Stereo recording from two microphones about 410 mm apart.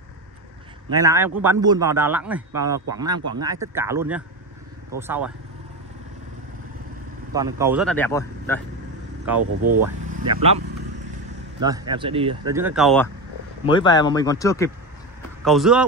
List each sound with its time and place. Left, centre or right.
0.8 s speech: centre
7.3 s speech: centre
9.4 s speech: right
10.1 s speech: centre
11.6 s speech: centre